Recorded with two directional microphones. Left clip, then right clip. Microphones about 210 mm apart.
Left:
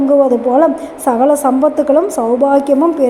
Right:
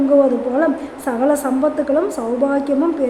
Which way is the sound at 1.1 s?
10° left (ahead or behind).